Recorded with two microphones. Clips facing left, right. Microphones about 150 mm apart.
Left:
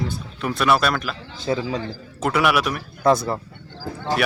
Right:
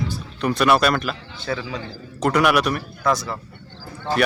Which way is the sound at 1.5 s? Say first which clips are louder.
Left 4 dB; 30° left (ahead or behind).